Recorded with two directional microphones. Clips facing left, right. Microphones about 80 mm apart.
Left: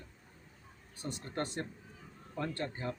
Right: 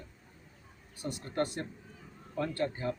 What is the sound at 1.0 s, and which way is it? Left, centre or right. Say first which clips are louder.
Speech: right 5 dB; left.